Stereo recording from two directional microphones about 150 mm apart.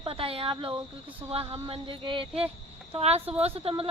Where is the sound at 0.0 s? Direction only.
40° right (ahead or behind).